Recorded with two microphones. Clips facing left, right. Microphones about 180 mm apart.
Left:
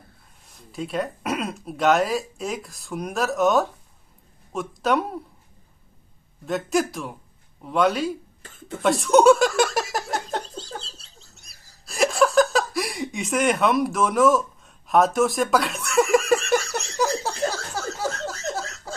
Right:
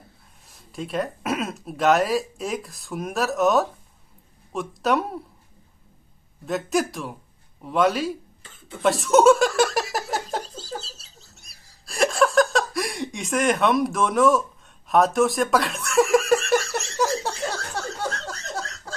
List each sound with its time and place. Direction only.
0.5 s speech: centre (ahead or behind)
6.4 s speech: centre (ahead or behind)
8.8 s giggle: centre (ahead or behind)
14.9 s a sound: centre (ahead or behind)
17.5 s cough: centre (ahead or behind)